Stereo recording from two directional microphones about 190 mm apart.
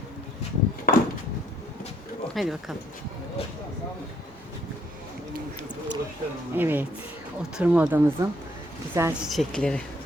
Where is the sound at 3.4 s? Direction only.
30° left (ahead or behind).